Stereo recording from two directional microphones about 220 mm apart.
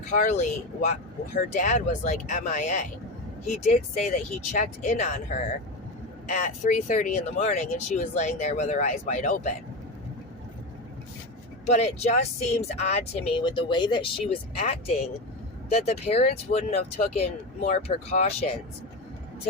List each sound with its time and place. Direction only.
0.1 s speech: 35° left (ahead or behind)
6.2 s speech: 35° left (ahead or behind)
11.6 s speech: 30° left (ahead or behind)
17.6 s speech: 40° left (ahead or behind)
17.8 s speech: 30° left (ahead or behind)